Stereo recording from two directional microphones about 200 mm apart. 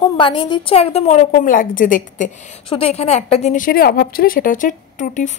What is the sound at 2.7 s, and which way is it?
A woman's voice, 30° left (ahead or behind).